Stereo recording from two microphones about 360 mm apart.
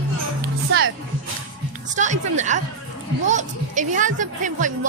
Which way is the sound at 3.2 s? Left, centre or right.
Right.